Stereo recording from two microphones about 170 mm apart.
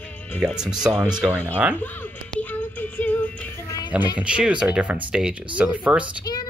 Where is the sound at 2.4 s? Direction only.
10° left (ahead or behind).